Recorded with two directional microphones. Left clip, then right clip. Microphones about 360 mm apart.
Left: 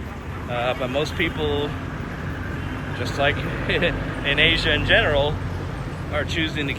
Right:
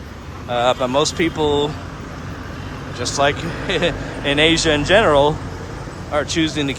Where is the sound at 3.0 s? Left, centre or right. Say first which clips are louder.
Right 5 dB; centre.